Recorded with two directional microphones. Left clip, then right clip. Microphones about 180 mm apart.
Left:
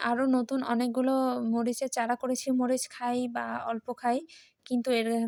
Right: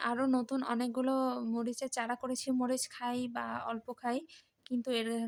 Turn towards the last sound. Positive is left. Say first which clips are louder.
# left 7 dB
turn(degrees=25)  # may be behind; listen again after turning